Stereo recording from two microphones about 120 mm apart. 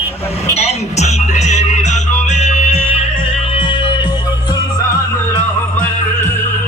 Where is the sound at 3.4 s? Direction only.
45° left (ahead or behind).